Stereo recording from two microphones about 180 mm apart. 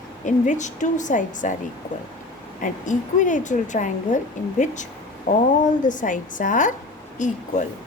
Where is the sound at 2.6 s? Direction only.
45° left (ahead or behind).